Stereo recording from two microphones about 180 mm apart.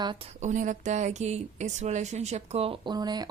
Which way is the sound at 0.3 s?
45° right (ahead or behind).